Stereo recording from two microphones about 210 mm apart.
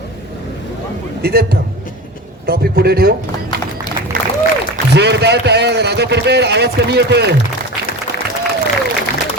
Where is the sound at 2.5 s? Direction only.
45° right (ahead or behind).